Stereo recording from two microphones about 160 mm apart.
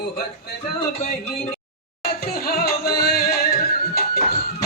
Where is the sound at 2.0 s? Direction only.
75° left (ahead or behind).